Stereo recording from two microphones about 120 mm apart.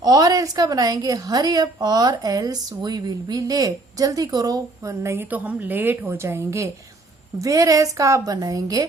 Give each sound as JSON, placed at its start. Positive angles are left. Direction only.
{"t": 0.0, "sound": "a woman's voice", "side_deg": -35}